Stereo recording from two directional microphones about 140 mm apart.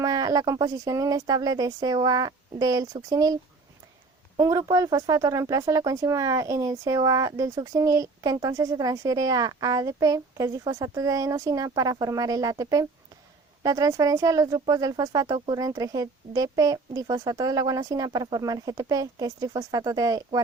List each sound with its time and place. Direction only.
0.0 s speech: 25° right (ahead or behind)
4.4 s speech: 25° right (ahead or behind)